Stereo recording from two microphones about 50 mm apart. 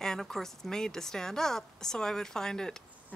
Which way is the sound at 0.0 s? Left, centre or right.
Centre.